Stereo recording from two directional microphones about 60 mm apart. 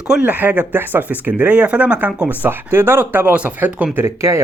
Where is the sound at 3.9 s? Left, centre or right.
Right.